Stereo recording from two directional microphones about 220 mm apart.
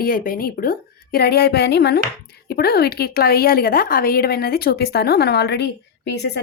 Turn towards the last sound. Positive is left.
turn(degrees=50)  # may be behind; listen again after turning